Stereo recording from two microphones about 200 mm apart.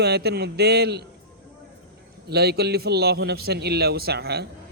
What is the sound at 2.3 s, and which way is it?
A man's voice, 55° right (ahead or behind).